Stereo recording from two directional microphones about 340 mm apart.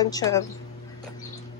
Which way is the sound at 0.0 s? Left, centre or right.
Centre.